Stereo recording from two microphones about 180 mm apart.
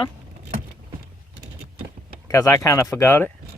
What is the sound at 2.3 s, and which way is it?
Speech, 15° left (ahead or behind).